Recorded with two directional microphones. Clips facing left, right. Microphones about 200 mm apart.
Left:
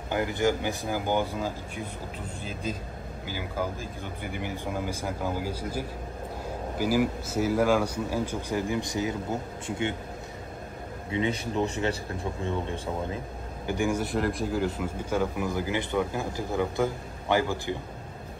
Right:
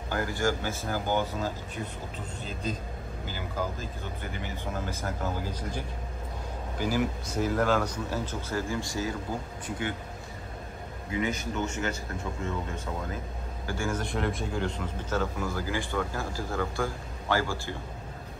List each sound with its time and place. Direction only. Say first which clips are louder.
0.1 s a man's voice: left 3 dB; 20° left (ahead or behind)
3.3 s a man's voice: left 2 dB; 10° left (ahead or behind); by 9.9 s 25° left (ahead or behind)
11.1 s a man's voice: left 2 dB; 30° left (ahead or behind)
13.7 s a man's voice: left 5 dB; 15° left (ahead or behind)
14.0 s a man's voice: left 3 dB; centre (ahead or behind); by 17.7 s 20° left (ahead or behind)